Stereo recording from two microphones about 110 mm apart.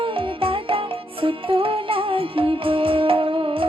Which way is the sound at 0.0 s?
50° right (ahead or behind).